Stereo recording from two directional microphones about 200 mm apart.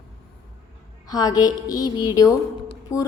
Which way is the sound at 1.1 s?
20° left (ahead or behind).